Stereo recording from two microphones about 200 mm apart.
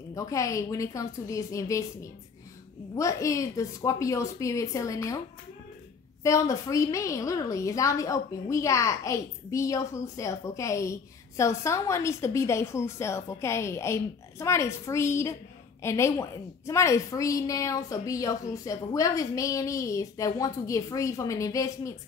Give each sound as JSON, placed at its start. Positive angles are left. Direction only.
{"t": 0.1, "sound": "a woman's voice", "side_deg": 15}
{"t": 6.2, "sound": "a woman's voice", "side_deg": 15}